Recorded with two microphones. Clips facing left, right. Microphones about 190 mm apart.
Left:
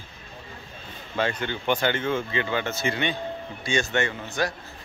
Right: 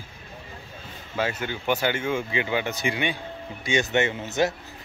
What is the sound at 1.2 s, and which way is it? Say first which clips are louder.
Speech: left 1 dB; 5° right (ahead or behind).